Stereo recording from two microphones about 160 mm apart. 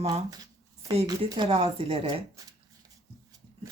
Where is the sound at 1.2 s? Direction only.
35° right (ahead or behind).